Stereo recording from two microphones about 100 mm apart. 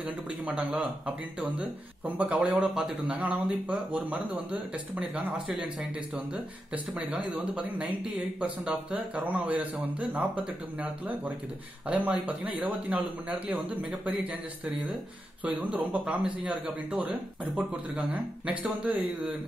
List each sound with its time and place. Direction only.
0.0 s speech: 10° right (ahead or behind)
5.5 s speech: 5° right (ahead or behind)
15.7 s speech: 10° right (ahead or behind)